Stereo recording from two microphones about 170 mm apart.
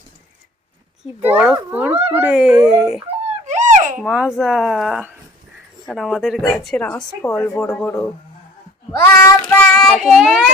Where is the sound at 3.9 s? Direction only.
5° right (ahead or behind); by 8.0 s 15° left (ahead or behind).